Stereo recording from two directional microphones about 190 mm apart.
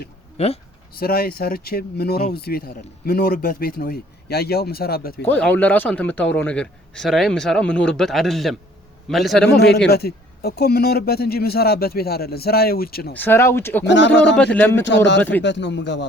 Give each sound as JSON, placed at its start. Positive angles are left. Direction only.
{"t": 0.3, "sound": "speech", "side_deg": 35}
{"t": 0.9, "sound": "speech", "side_deg": 55}
{"t": 5.2, "sound": "a man's voice", "side_deg": 10}
{"t": 9.5, "sound": "a man's voice", "side_deg": 60}
{"t": 13.1, "sound": "speech", "side_deg": 10}
{"t": 13.8, "sound": "speech", "side_deg": 70}
{"t": 14.3, "sound": "speech", "side_deg": 5}
{"t": 14.8, "sound": "speech", "side_deg": 70}